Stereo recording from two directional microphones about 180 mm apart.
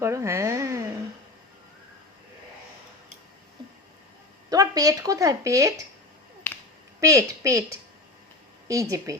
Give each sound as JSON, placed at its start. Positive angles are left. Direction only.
{"t": 0.0, "sound": "speech", "side_deg": -15}
{"t": 4.4, "sound": "speech", "side_deg": -20}
{"t": 6.5, "sound": "finger snapping", "side_deg": 10}
{"t": 7.0, "sound": "speech", "side_deg": -15}